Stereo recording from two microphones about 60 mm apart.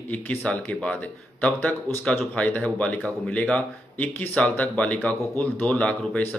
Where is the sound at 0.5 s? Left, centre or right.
Left.